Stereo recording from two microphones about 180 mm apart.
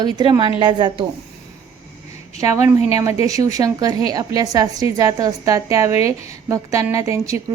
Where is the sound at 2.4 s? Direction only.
20° right (ahead or behind).